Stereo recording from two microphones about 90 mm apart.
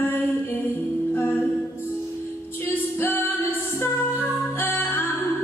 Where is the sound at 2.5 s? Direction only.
25° left (ahead or behind).